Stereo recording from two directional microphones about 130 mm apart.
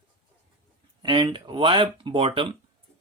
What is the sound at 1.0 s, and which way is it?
Speech, 40° right (ahead or behind).